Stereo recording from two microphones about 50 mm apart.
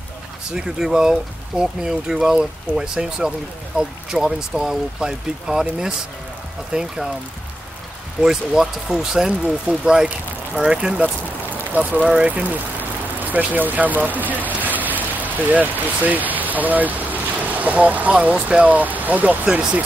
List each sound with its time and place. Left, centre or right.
0.5 s speech: centre
8.2 s speech: centre
11.5 s vehicle: right
13.4 s speech: right
14.6 s vehicle: right
18.3 s speech: right
19.4 s speech: right